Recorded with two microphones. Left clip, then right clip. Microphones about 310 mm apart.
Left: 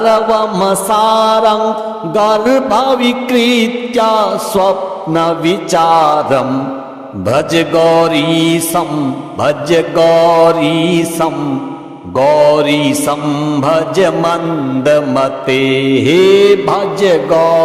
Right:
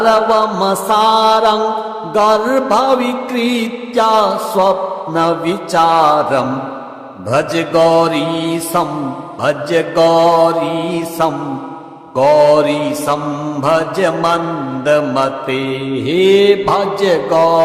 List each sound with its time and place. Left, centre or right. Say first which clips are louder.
0.0 s mantra: left 1 dB; left